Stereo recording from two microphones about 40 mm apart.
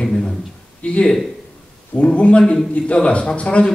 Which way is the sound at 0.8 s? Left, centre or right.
Left.